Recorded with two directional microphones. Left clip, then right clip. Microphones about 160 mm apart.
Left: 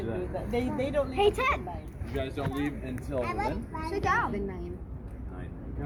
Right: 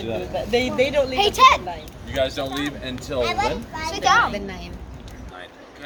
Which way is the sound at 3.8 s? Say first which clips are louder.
Right 10 dB; 25° right (ahead or behind).